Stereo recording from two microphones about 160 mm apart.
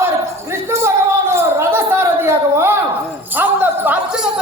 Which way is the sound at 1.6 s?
15° right (ahead or behind).